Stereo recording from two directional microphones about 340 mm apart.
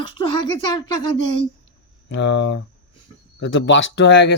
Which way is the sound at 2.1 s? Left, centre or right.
Left.